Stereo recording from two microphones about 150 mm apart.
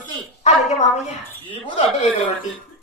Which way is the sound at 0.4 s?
50° left (ahead or behind).